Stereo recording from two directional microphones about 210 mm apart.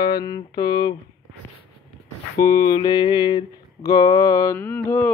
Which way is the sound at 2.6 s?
15° left (ahead or behind).